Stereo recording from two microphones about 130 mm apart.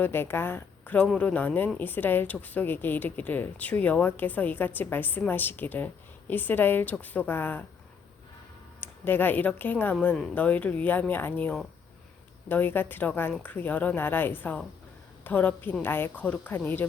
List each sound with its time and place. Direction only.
0.0 s a woman's voice: 15° left (ahead or behind)
8.8 s a woman's voice: 15° left (ahead or behind)